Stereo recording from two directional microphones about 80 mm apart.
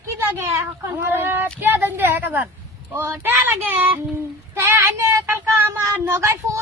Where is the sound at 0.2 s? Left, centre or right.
Right.